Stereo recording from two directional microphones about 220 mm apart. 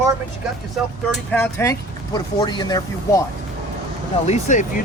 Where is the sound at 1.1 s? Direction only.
5° left (ahead or behind).